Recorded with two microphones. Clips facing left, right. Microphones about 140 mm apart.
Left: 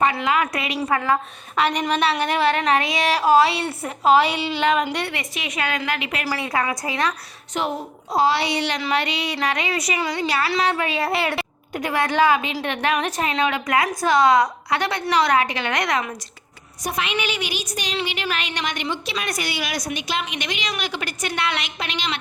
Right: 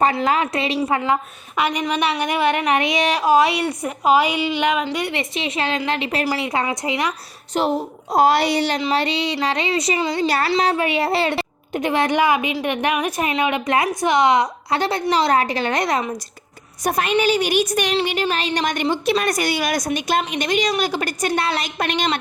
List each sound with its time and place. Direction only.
0.0 s a woman's voice: 35° right (ahead or behind)
0.8 s a sound: 20° right (ahead or behind)
5.1 s a woman's voice: 25° right (ahead or behind)
6.2 s a woman's voice: 20° right (ahead or behind)
7.6 s a woman's voice: 35° right (ahead or behind)
10.2 s a woman's voice: 40° right (ahead or behind)
16.8 s a woman's voice: 45° right (ahead or behind)
21.8 s a woman's voice: 50° right (ahead or behind)